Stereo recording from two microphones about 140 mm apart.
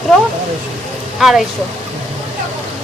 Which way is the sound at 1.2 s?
Centre (ahead or behind).